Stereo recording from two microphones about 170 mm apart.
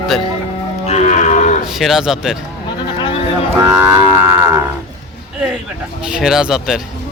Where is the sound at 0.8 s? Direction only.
40° left (ahead or behind).